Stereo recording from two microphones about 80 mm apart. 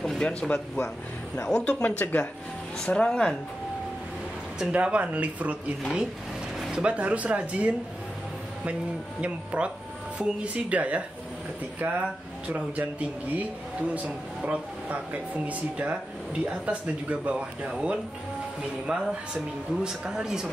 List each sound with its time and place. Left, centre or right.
0.0 s speech: centre
4.6 s speech: centre
6.7 s speech: centre
9.2 s speech: centre